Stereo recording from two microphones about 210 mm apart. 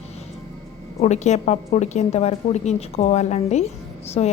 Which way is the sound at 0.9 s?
30° left (ahead or behind).